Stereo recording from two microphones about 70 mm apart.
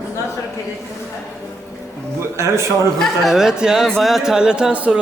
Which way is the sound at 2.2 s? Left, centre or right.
Right.